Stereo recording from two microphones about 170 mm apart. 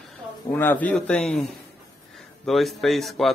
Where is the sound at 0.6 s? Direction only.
10° left (ahead or behind).